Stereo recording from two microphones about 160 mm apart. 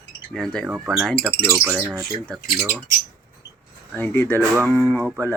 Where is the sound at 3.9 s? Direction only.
15° left (ahead or behind).